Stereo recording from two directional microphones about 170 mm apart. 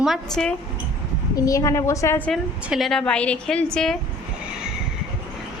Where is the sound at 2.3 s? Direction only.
Centre (ahead or behind).